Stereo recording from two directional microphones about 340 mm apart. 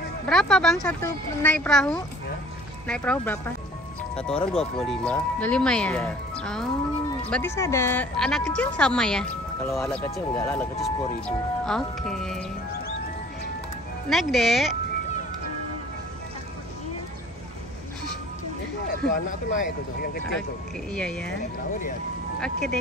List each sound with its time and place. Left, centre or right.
0.3 s a woman's voice: centre
14.0 s a woman's voice: centre
18.9 s speech: left
20.9 s a woman's voice: centre